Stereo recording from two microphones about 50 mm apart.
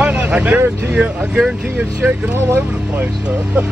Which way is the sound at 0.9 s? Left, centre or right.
Centre.